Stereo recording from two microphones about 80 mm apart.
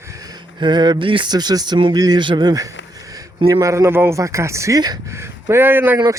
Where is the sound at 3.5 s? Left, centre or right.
Right.